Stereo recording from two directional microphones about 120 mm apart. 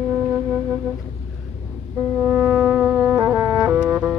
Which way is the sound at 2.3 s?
10° right (ahead or behind).